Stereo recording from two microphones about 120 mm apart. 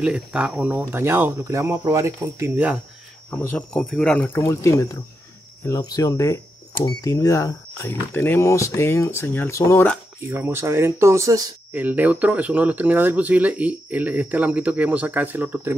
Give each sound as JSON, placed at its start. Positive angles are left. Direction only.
{"t": 0.0, "sound": "speech", "side_deg": -10}
{"t": 2.5, "sound": "speech", "side_deg": -10}
{"t": 3.3, "sound": "speech", "side_deg": 15}
{"t": 4.5, "sound": "speech", "side_deg": 25}
{"t": 10.3, "sound": "speech", "side_deg": -20}
{"t": 11.7, "sound": "speech", "side_deg": -15}